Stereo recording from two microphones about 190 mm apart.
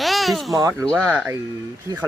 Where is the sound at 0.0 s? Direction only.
Centre (ahead or behind).